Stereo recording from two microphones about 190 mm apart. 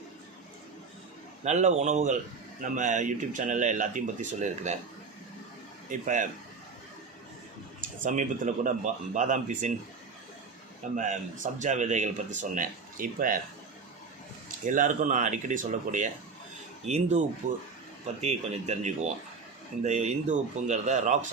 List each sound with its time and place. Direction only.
1.5 s speech: 35° right (ahead or behind)
5.9 s speech: 45° right (ahead or behind)
8.0 s speech: 40° right (ahead or behind)
10.9 s speech: 40° right (ahead or behind)
14.6 s speech: 45° right (ahead or behind)